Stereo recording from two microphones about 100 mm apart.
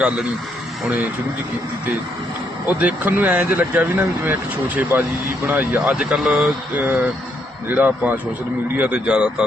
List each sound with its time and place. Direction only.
2.6 s speech: 15° right (ahead or behind)
5.9 s speech: 5° right (ahead or behind)
6.7 s speech: 20° right (ahead or behind)